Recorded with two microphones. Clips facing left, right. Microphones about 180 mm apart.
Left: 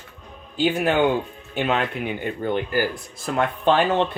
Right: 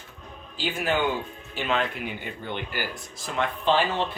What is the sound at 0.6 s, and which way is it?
Speech, 50° left (ahead or behind).